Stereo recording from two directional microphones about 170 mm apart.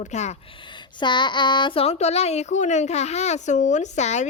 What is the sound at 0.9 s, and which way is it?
A woman's voice, 25° left (ahead or behind).